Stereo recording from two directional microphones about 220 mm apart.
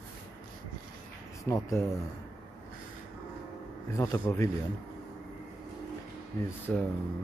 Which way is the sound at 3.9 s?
10° left (ahead or behind).